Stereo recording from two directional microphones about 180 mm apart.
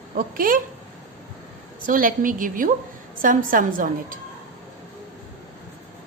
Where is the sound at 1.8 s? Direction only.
50° right (ahead or behind).